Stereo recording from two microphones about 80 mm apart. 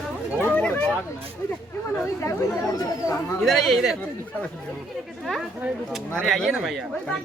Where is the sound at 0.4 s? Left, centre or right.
Centre.